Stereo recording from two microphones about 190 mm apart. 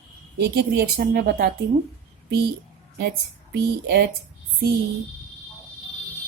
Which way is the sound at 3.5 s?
60° right (ahead or behind).